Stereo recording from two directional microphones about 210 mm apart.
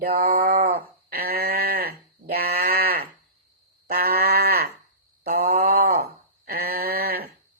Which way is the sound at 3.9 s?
50° right (ahead or behind).